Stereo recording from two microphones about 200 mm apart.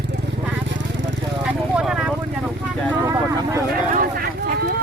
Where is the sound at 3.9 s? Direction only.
45° right (ahead or behind).